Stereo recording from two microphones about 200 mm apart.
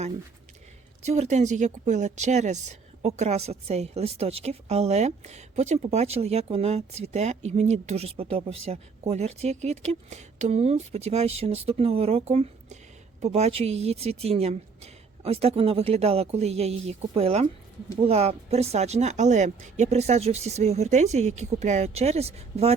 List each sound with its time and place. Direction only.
1.0 s a woman's voice: 35° right (ahead or behind)